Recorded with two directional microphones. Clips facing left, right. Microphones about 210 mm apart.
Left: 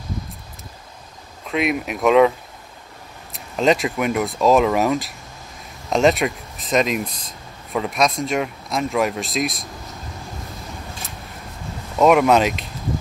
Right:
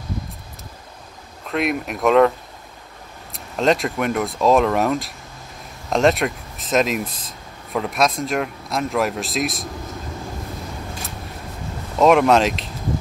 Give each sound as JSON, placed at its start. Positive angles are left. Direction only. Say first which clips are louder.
{"t": 1.5, "sound": "speech", "louder": "left 1 dB", "side_deg": 0}
{"t": 3.3, "sound": "speech", "louder": "left 1 dB", "side_deg": 0}
{"t": 12.0, "sound": "speech", "louder": "even", "side_deg": 0}